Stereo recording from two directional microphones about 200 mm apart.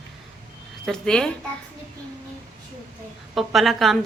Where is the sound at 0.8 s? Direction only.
5° left (ahead or behind).